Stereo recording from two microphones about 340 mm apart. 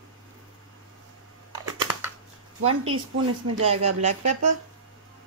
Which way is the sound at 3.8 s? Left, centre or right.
Right.